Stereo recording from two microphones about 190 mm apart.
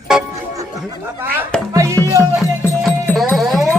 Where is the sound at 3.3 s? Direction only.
Centre (ahead or behind).